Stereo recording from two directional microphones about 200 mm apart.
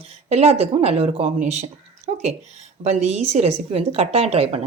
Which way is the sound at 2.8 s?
35° right (ahead or behind).